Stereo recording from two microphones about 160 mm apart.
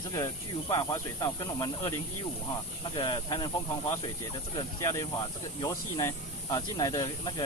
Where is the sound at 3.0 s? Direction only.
30° left (ahead or behind).